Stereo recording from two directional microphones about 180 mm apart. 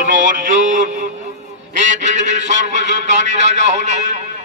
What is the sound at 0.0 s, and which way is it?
Music, 45° right (ahead or behind).